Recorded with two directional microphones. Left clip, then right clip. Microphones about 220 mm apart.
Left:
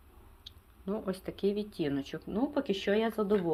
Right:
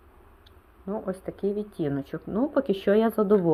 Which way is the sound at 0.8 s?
Centre (ahead or behind).